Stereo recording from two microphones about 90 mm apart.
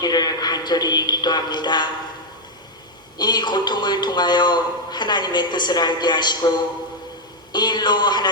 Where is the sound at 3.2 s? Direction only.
55° left (ahead or behind).